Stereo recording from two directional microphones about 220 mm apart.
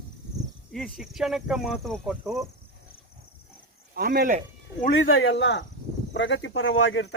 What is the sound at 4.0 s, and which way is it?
Speech, 45° right (ahead or behind).